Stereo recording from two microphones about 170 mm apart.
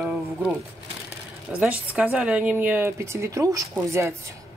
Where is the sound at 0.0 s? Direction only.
5° right (ahead or behind).